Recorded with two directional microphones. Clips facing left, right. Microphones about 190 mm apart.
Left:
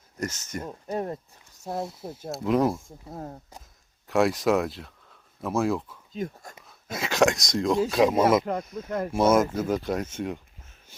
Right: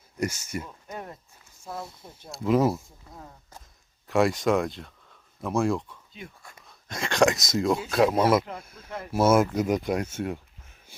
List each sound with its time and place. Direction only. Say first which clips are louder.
0.2 s speech: right 3 dB; 10° right (ahead or behind)
0.6 s speech: left 8 dB; 35° left (ahead or behind)
1.8 s speech: left 8 dB; centre (ahead or behind)
3.2 s speech: left 9 dB; 45° left (ahead or behind)
4.0 s speech: even; centre (ahead or behind)
6.1 s speech: left 12 dB; 40° left (ahead or behind)
6.7 s speech: left 1 dB; 5° left (ahead or behind)
8.8 s speech: left 8 dB; 50° left (ahead or behind)
9.1 s speech: right 1 dB; 5° right (ahead or behind)